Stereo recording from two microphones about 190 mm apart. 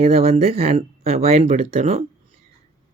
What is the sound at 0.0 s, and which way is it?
Speech, 30° right (ahead or behind).